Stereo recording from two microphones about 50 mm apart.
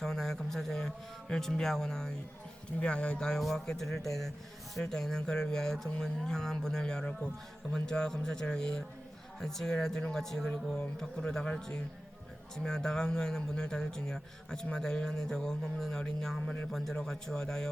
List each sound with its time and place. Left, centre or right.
0.0 s a man's voice: centre
2.8 s a man's voice: left